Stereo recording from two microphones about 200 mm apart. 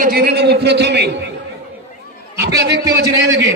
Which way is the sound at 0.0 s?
50° right (ahead or behind).